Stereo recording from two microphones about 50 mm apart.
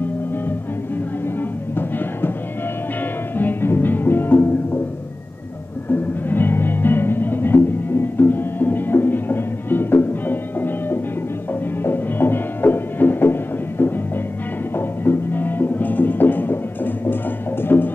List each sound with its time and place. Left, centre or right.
1.8 s music: left
3.3 s music: left
5.9 s music: left